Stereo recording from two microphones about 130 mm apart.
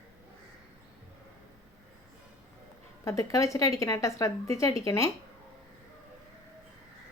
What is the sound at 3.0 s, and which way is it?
Speech, 25° left (ahead or behind).